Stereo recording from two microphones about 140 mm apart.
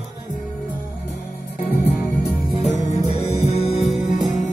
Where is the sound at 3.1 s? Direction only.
45° left (ahead or behind).